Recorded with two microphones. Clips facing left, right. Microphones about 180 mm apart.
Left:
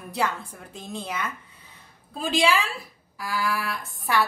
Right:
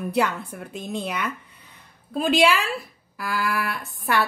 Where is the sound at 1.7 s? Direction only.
60° right (ahead or behind).